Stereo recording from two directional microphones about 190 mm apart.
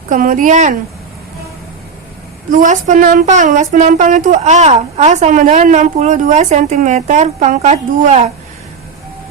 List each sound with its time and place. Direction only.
0.1 s speech: 45° right (ahead or behind)
2.5 s a woman's voice: 45° right (ahead or behind)